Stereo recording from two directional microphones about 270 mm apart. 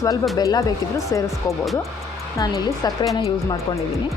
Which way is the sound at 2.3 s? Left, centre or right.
Centre.